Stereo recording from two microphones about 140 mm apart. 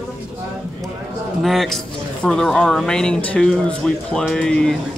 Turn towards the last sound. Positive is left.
turn(degrees=5)  # may be behind; listen again after turning